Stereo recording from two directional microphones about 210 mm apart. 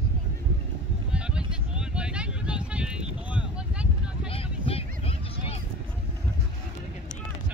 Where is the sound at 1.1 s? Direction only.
5° right (ahead or behind).